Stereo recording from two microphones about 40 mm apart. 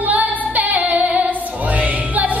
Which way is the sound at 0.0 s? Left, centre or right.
Right.